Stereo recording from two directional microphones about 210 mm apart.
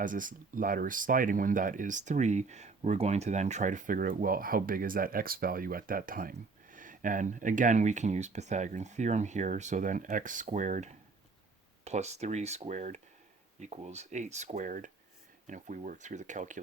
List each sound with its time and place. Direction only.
0.0 s speech: 40° right (ahead or behind)